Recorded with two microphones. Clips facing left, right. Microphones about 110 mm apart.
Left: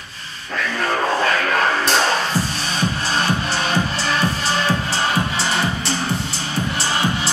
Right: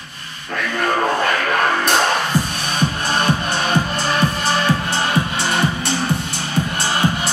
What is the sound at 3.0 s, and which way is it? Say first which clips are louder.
Music: right 2 dB; 55° right (ahead or behind).